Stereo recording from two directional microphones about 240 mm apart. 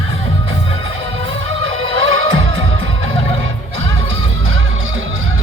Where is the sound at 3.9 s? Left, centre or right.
Right.